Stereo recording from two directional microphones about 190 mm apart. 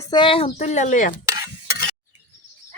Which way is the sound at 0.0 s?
25° left (ahead or behind).